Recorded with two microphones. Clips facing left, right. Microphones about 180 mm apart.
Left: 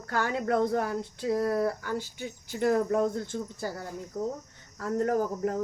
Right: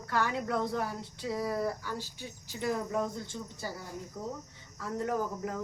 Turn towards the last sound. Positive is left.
turn(degrees=45)  # may be behind; listen again after turning